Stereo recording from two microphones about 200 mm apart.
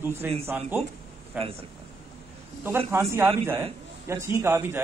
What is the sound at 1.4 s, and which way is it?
Speech, 30° right (ahead or behind).